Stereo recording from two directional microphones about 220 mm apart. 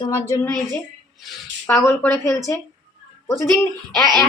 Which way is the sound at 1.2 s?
5° left (ahead or behind).